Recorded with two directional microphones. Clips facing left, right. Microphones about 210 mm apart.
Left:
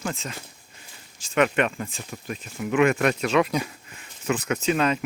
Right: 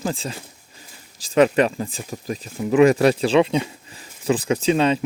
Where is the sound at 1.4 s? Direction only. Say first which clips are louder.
Right 6 dB; 30° right (ahead or behind).